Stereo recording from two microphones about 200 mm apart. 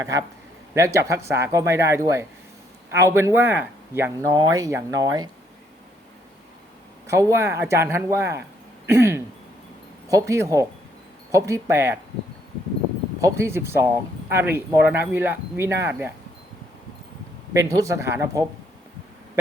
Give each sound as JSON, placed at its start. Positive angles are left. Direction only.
{"t": 0.0, "sound": "speech", "side_deg": -15}
{"t": 7.1, "sound": "speech", "side_deg": -15}
{"t": 8.9, "sound": "a sound", "side_deg": -15}
{"t": 10.1, "sound": "speech", "side_deg": -15}
{"t": 13.2, "sound": "speech", "side_deg": -15}
{"t": 17.5, "sound": "speech", "side_deg": -15}